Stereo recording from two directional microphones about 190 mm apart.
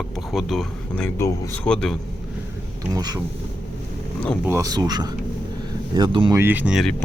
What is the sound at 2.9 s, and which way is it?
Speech, 20° right (ahead or behind).